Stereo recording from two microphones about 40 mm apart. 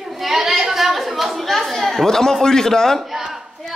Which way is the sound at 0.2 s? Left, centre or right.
Centre.